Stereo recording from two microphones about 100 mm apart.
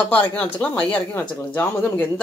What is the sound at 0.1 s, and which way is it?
A man's voice, 15° left (ahead or behind).